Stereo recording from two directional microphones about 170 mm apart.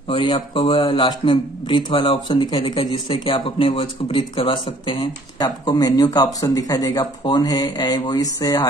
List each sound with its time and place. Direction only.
0.1 s speech: 30° left (ahead or behind)